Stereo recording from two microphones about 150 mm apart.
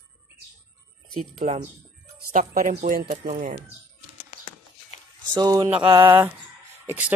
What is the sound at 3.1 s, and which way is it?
Speech, 60° right (ahead or behind).